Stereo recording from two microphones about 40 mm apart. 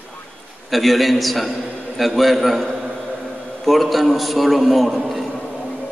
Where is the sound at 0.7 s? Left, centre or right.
Centre.